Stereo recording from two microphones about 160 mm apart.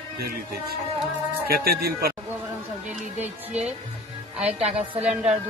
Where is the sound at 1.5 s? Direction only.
70° right (ahead or behind).